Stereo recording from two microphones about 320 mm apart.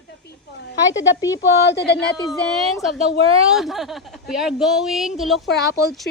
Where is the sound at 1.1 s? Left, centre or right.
Centre.